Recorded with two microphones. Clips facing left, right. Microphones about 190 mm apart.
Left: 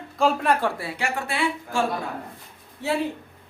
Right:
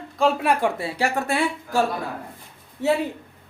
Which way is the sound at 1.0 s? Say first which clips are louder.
Right 3 dB; 40° right (ahead or behind).